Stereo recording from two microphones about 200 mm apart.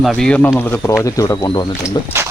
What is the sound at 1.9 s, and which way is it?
Speech, 10° right (ahead or behind).